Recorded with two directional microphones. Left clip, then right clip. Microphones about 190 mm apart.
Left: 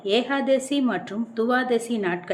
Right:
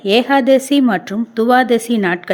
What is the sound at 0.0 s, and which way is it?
A woman's voice, 45° right (ahead or behind).